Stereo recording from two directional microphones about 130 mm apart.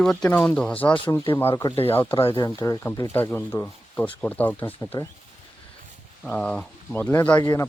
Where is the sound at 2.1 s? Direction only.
45° left (ahead or behind).